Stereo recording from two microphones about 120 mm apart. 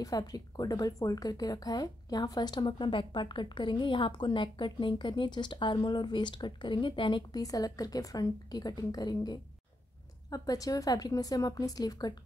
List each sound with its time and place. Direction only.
0.0 s a woman's voice: 30° left (ahead or behind)
7.4 s a woman's voice: 30° left (ahead or behind)